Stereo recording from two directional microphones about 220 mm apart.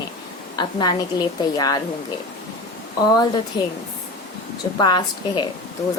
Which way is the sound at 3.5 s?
20° left (ahead or behind).